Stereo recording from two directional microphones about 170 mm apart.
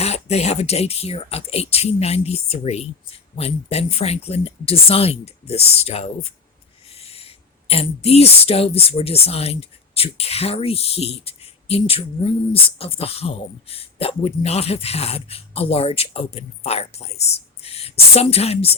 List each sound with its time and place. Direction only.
0.0 s a man's voice: 40° left (ahead or behind)